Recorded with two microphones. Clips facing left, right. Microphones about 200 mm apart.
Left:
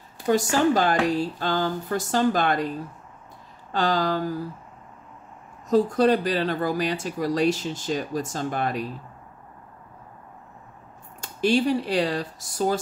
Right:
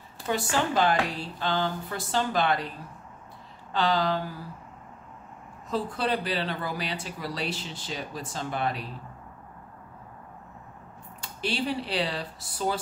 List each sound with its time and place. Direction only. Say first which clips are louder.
0.3 s speech: left 7 dB; 45° left (ahead or behind)
3.7 s speech: left 2 dB; 45° left (ahead or behind)
5.7 s speech: left 9 dB; 45° left (ahead or behind)
11.1 s speech: left 9 dB; 45° left (ahead or behind)